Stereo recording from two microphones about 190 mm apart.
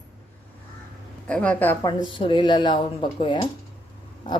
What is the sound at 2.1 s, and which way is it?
Speech, 25° left (ahead or behind).